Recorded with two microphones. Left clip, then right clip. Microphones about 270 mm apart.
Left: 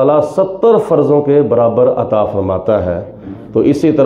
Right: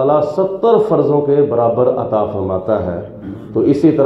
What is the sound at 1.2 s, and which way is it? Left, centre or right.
Speech, left.